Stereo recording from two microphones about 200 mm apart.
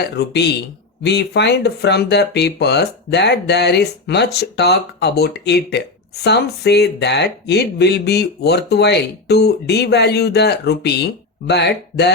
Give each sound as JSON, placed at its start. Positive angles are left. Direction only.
{"t": 0.0, "sound": "speech", "side_deg": 55}